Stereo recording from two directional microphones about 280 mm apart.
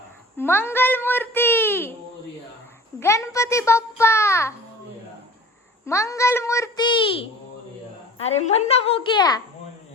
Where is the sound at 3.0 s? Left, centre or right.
Centre.